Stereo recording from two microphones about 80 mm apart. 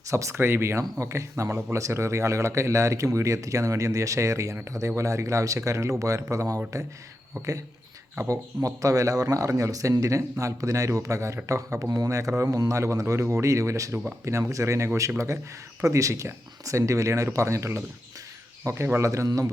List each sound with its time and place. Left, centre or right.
0.1 s a man's voice: right